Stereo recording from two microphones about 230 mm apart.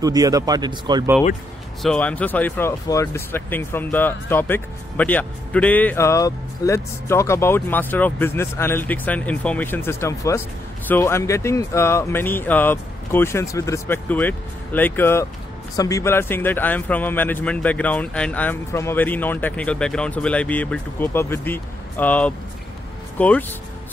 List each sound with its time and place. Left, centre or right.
0.0 s speech: centre
1.8 s speech: centre